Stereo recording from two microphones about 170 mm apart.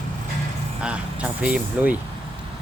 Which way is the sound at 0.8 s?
5° right (ahead or behind).